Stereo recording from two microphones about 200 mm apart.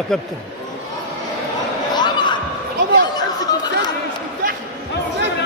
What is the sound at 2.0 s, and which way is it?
Basketball bounce, 20° left (ahead or behind).